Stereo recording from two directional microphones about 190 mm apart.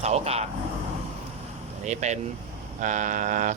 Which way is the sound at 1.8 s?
35° right (ahead or behind).